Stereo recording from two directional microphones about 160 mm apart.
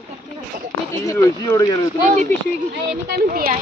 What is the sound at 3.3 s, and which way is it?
Speech, 65° right (ahead or behind).